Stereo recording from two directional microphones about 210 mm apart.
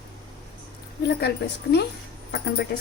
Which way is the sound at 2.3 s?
50° left (ahead or behind).